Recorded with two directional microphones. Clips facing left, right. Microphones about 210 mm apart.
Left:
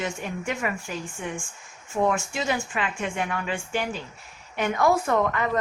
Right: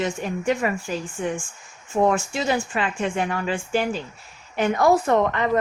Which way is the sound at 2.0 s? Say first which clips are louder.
Right 3 dB; 35° right (ahead or behind).